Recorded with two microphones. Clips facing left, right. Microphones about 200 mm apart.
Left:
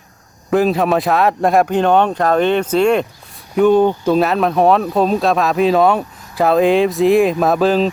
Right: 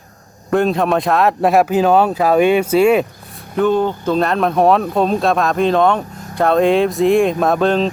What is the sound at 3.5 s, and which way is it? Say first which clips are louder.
Speech: left 4 dB; 15° left (ahead or behind).